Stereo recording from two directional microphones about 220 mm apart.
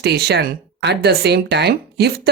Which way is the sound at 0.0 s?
50° right (ahead or behind).